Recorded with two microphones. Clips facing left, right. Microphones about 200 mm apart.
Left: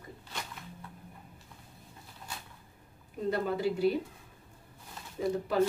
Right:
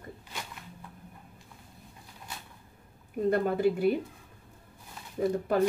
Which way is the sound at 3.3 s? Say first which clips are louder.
Right 5 dB; 55° right (ahead or behind).